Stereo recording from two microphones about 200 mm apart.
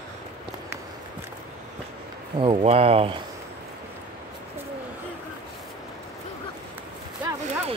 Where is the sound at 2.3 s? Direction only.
30° right (ahead or behind).